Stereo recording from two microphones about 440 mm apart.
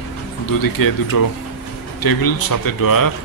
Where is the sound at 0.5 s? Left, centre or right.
Left.